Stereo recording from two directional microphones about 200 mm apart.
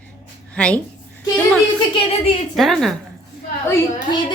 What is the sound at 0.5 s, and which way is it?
Speech, 5° left (ahead or behind).